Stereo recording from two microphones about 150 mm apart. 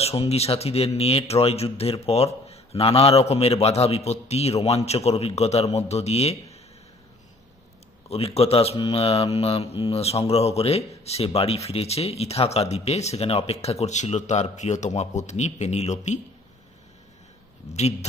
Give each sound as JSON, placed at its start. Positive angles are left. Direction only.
{"t": 0.0, "sound": "speech", "side_deg": 40}
{"t": 8.1, "sound": "speech", "side_deg": 40}